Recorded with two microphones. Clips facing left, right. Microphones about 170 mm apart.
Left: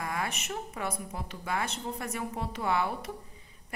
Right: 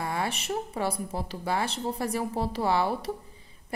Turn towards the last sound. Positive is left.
turn(degrees=-35)  # may be behind; listen again after turning